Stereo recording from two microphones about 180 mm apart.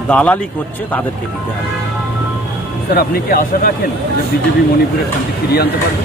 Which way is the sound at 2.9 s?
55° left (ahead or behind).